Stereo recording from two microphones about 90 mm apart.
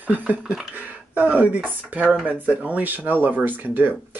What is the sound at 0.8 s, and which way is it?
Speech, 20° right (ahead or behind).